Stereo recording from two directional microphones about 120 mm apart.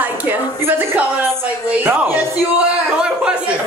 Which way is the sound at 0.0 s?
15° right (ahead or behind).